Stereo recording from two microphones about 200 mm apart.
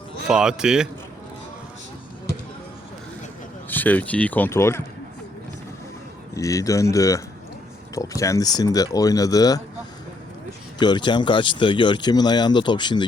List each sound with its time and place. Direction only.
0.3 s speech: 5° right (ahead or behind)
3.7 s speech: 10° left (ahead or behind)
6.3 s speech: 15° left (ahead or behind)
10.8 s speech: 20° left (ahead or behind)